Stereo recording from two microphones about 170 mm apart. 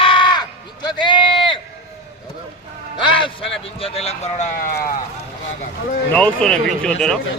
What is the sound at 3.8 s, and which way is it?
Speech, 35° left (ahead or behind).